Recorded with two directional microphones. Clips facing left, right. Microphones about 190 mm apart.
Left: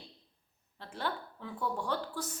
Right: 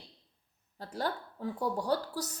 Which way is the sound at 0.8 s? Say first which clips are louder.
Right 3 dB; 40° right (ahead or behind).